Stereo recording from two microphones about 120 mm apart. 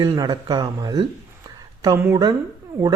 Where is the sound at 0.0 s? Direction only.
35° right (ahead or behind).